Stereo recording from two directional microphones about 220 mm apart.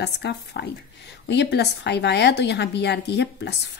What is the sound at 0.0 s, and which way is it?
A woman's voice, 50° left (ahead or behind).